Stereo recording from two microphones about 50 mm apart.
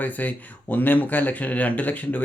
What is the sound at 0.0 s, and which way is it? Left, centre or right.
Speech, left.